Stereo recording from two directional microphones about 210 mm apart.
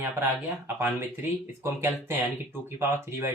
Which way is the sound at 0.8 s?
10° right (ahead or behind).